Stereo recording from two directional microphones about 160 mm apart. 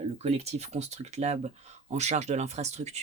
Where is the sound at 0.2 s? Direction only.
40° right (ahead or behind).